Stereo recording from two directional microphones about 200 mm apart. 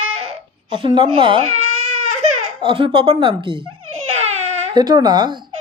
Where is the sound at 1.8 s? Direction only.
35° right (ahead or behind).